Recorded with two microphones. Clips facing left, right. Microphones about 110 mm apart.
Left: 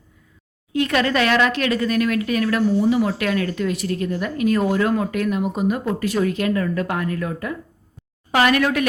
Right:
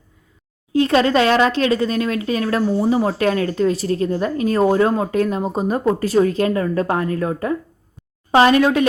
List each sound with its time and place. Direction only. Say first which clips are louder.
0.7 s speech: right 5 dB; 30° right (ahead or behind)